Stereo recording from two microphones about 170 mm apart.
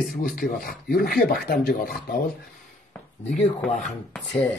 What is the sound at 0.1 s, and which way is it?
Speech, 60° left (ahead or behind).